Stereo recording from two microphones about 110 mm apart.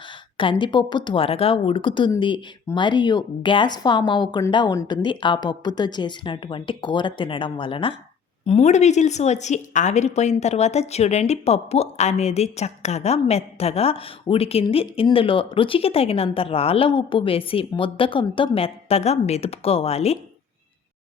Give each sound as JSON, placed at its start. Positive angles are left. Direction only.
{"t": 0.6, "sound": "a woman's voice", "side_deg": 45}
{"t": 8.4, "sound": "a woman's voice", "side_deg": 85}